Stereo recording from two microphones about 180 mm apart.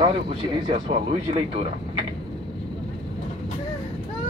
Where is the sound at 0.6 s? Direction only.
30° right (ahead or behind).